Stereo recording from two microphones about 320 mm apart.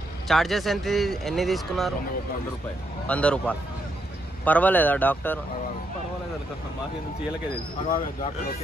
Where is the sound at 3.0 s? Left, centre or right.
Centre.